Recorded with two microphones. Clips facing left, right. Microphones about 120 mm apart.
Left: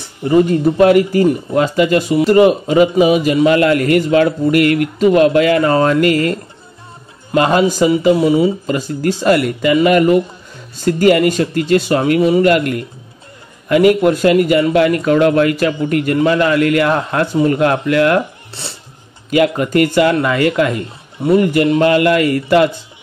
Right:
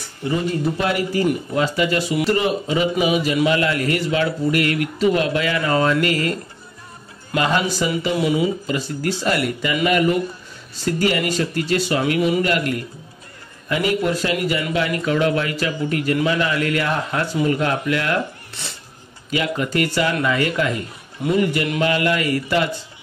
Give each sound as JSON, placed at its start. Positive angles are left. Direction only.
{"t": 0.4, "sound": "a man's voice", "side_deg": 50}
{"t": 7.3, "sound": "a man's voice", "side_deg": 45}
{"t": 8.6, "sound": "a man's voice", "side_deg": 45}
{"t": 12.2, "sound": "speech", "side_deg": 35}
{"t": 12.4, "sound": "a man's voice", "side_deg": 50}
{"t": 18.5, "sound": "speech", "side_deg": 30}
{"t": 19.3, "sound": "a man's voice", "side_deg": 50}
{"t": 21.6, "sound": "speech", "side_deg": 35}
{"t": 21.9, "sound": "a man's voice", "side_deg": 50}